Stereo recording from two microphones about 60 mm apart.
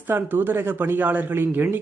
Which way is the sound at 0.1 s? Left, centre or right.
Right.